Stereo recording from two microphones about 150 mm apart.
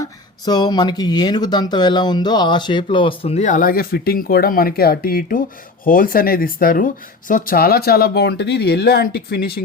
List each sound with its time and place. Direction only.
0.0 s speech: 25° left (ahead or behind); by 9.6 s 90° left